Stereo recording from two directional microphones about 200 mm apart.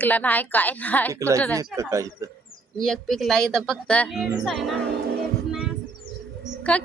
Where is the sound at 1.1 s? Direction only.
15° right (ahead or behind).